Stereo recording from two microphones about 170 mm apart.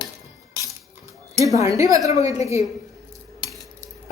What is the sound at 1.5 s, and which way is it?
A woman's voice, 20° right (ahead or behind).